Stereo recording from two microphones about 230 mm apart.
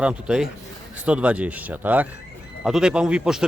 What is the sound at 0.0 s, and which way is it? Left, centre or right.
A man's voice, centre.